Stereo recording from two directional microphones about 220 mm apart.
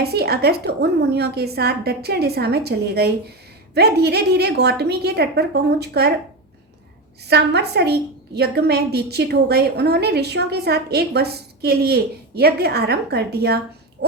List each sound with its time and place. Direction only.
0.0 s a woman's voice: 45° right (ahead or behind)
7.3 s a woman's voice: 50° right (ahead or behind)